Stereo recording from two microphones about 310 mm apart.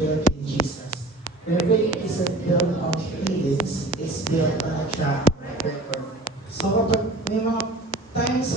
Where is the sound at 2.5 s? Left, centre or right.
Centre.